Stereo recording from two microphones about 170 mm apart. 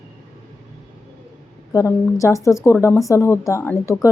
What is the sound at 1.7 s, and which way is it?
A woman's voice, 20° left (ahead or behind).